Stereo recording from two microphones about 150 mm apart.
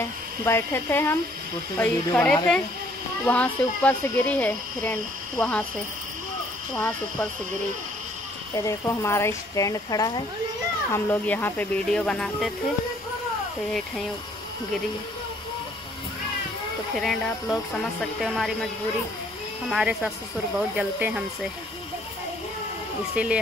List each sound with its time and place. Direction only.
0.0 s speech: 15° left (ahead or behind)
6.7 s speech: 5° left (ahead or behind)
8.5 s speech: 20° left (ahead or behind)
10.9 s speech: 15° left (ahead or behind)
17.0 s speech: centre (ahead or behind)
19.7 s speech: 5° right (ahead or behind)
23.1 s speech: 10° right (ahead or behind)